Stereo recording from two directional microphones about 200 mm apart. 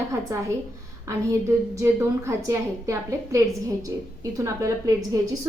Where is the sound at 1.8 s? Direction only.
15° right (ahead or behind).